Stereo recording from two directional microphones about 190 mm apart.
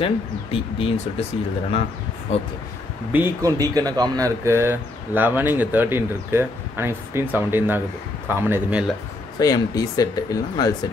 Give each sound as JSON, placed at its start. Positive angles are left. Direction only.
{"t": 0.0, "sound": "speech", "side_deg": 30}
{"t": 3.1, "sound": "speech", "side_deg": -15}
{"t": 9.4, "sound": "speech", "side_deg": 20}